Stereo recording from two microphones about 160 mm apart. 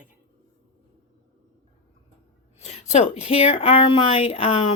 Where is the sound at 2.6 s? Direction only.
45° left (ahead or behind).